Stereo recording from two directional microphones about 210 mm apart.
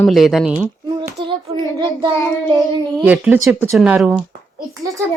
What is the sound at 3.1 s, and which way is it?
Speech, 10° right (ahead or behind).